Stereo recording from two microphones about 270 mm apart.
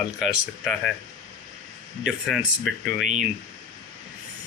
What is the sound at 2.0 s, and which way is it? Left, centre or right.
Speech, centre.